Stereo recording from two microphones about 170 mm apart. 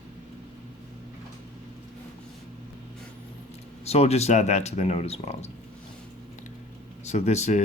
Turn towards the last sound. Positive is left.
turn(degrees=45)  # may be behind; listen again after turning